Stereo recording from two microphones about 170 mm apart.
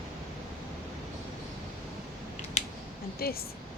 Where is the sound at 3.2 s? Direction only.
65° left (ahead or behind).